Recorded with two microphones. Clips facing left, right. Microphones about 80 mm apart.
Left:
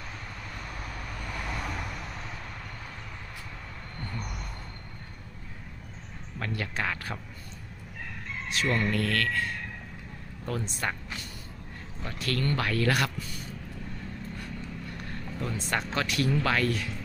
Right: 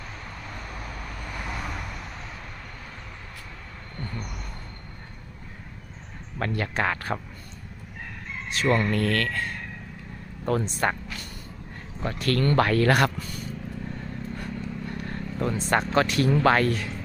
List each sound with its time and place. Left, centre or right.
1.3 s vehicle: centre
6.4 s speech: right
8.4 s speech: right
11.9 s speech: right
14.3 s vehicle: right